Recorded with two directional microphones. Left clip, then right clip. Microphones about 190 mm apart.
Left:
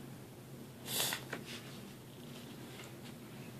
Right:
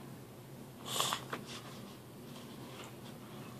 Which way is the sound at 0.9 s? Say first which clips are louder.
Right 2 dB; 20° left (ahead or behind).